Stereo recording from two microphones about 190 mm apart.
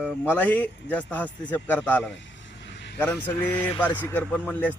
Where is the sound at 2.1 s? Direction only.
70° left (ahead or behind).